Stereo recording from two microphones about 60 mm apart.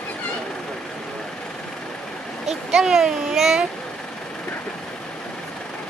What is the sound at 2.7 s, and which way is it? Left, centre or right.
Speech, centre.